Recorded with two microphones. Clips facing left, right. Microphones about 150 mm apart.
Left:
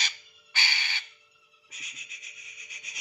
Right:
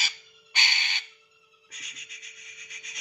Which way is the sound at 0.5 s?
20° right (ahead or behind).